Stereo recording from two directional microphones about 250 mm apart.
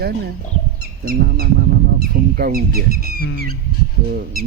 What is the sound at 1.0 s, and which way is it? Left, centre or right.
Speech, right.